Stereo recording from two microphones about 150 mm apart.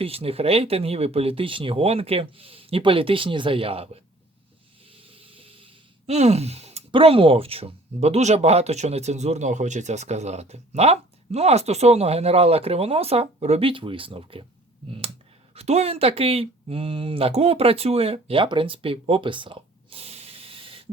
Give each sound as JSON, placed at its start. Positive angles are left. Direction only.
{"t": 0.0, "sound": "speech", "side_deg": -40}
{"t": 4.9, "sound": "a sound", "side_deg": -40}
{"t": 15.5, "sound": "speech", "side_deg": -45}